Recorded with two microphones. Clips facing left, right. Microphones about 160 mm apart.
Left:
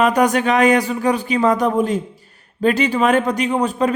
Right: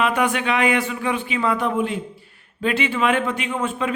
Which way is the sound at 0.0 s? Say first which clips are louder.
Left 5 dB; 40° left (ahead or behind).